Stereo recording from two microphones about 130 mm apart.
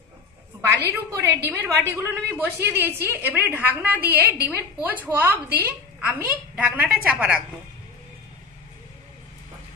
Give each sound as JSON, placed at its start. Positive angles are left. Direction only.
{"t": 0.7, "sound": "a woman's voice", "side_deg": -20}